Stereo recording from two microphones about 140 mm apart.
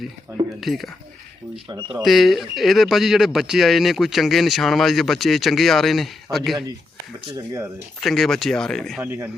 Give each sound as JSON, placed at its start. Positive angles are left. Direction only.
{"t": 0.6, "sound": "speech", "side_deg": 0}
{"t": 1.7, "sound": "speech", "side_deg": -30}
{"t": 2.0, "sound": "speech", "side_deg": 0}
{"t": 7.3, "sound": "speech", "side_deg": -20}
{"t": 8.0, "sound": "speech", "side_deg": 0}
{"t": 9.0, "sound": "speech", "side_deg": -15}